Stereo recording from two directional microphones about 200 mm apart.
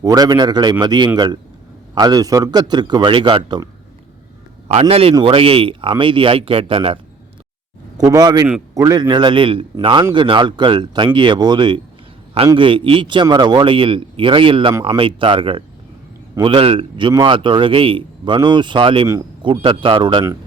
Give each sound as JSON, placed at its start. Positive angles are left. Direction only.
{"t": 0.0, "sound": "a man's voice", "side_deg": -20}
{"t": 4.7, "sound": "a man's voice", "side_deg": -30}
{"t": 19.0, "sound": "a man's voice", "side_deg": -15}